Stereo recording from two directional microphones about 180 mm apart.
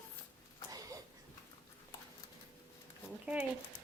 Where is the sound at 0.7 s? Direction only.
20° right (ahead or behind).